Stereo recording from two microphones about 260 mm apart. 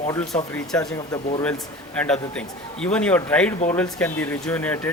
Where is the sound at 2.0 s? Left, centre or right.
Centre.